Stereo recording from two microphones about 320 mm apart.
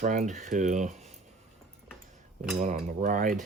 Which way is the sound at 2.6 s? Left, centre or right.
Right.